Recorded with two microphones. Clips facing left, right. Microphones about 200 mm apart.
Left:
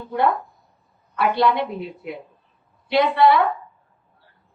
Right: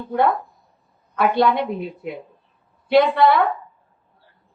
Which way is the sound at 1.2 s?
50° right (ahead or behind).